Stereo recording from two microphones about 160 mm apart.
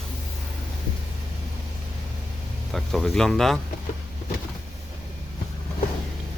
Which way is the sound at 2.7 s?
Centre (ahead or behind).